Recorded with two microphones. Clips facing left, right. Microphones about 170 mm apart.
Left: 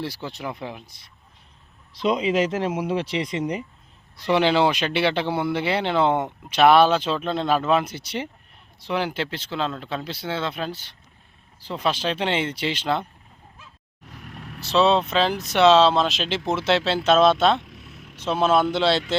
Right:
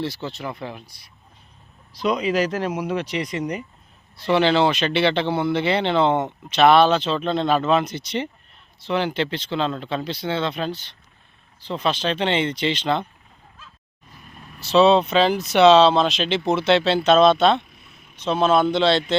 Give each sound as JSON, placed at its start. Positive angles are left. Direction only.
{"t": 0.0, "sound": "speech", "side_deg": 10}
{"t": 4.2, "sound": "speech", "side_deg": 15}
{"t": 14.0, "sound": "vehicle", "side_deg": 75}
{"t": 14.6, "sound": "speech", "side_deg": 0}
{"t": 17.6, "sound": "vehicle", "side_deg": 90}
{"t": 18.2, "sound": "speech", "side_deg": 5}